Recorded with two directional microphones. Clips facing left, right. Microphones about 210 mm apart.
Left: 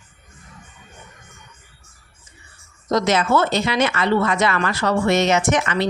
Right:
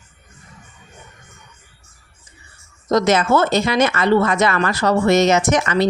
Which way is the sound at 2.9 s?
45° right (ahead or behind).